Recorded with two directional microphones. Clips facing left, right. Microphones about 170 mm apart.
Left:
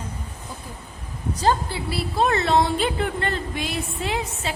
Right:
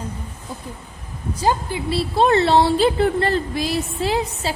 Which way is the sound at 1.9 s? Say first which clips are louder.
Right 5 dB; 30° right (ahead or behind).